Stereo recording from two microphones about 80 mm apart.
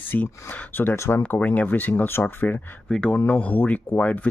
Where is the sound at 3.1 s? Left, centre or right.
Left.